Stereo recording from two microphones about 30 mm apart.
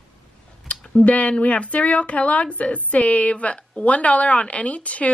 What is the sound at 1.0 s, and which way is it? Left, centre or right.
A woman's voice, left.